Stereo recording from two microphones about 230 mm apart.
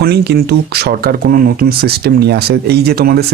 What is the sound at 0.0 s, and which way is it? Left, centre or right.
Speech, right.